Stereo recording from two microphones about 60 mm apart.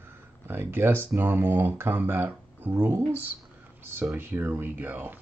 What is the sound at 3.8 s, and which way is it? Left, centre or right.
Speech, right.